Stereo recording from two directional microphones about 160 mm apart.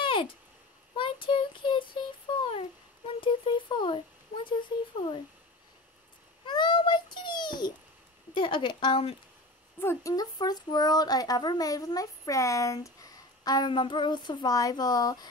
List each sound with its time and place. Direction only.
0.0 s a sound: 30° left (ahead or behind)
4.5 s speech: 30° left (ahead or behind)
6.4 s babbling: 30° left (ahead or behind)
8.4 s speech: 30° left (ahead or behind)
9.8 s speech: 20° left (ahead or behind)